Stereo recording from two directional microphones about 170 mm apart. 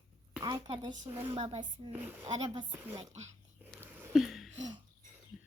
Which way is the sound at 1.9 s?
10° right (ahead or behind).